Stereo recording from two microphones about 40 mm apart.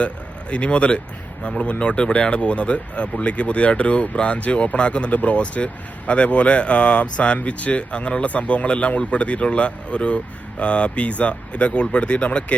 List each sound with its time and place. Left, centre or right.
0.5 s speech: left